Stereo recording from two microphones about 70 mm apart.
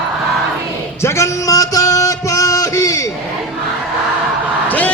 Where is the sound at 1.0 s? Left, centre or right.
Left.